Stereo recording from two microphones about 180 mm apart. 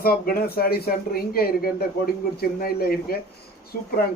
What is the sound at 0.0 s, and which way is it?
A man's voice, 55° left (ahead or behind).